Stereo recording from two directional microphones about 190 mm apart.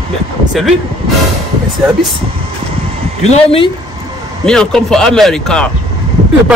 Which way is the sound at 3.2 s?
35° left (ahead or behind).